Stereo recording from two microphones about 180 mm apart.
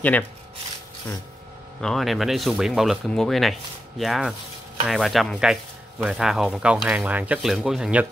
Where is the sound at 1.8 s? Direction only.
Centre (ahead or behind).